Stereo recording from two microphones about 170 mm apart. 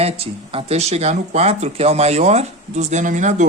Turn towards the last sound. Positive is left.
turn(degrees=-45)  # may be behind; listen again after turning